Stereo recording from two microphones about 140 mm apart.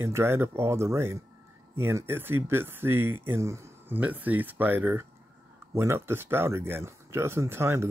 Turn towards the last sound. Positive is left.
turn(degrees=-20)  # may be behind; listen again after turning